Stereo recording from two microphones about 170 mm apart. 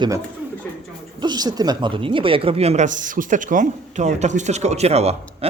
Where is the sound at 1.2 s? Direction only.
25° right (ahead or behind).